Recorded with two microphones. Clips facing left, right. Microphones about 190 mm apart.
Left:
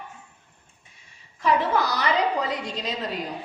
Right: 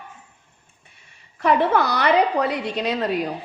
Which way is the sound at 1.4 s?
60° right (ahead or behind).